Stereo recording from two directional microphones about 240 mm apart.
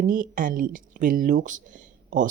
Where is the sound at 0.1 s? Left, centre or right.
Right.